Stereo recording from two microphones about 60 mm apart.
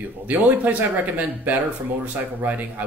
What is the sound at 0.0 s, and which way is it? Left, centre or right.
Speech, right.